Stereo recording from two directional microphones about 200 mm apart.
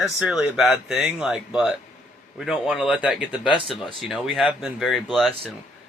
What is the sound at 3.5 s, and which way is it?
Speech, 25° right (ahead or behind).